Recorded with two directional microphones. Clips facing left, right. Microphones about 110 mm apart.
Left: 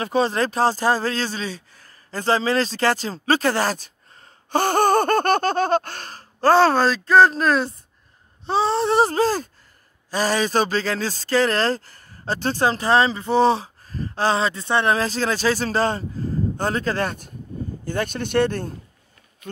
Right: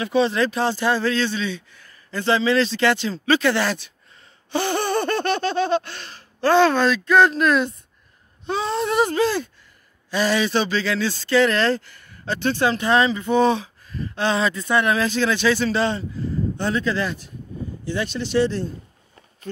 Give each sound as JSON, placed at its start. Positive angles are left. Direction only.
{"t": 0.0, "sound": "speech", "side_deg": 40}